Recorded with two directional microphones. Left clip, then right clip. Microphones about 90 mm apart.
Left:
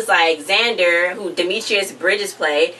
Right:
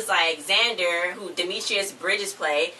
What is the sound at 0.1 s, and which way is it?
Speech, 15° right (ahead or behind).